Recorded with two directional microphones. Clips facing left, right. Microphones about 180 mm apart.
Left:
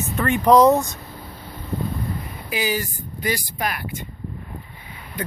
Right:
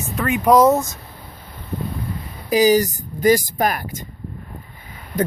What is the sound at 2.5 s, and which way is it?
Speech, 40° right (ahead or behind).